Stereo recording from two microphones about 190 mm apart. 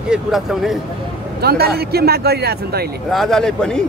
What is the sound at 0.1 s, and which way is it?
Speech, centre (ahead or behind).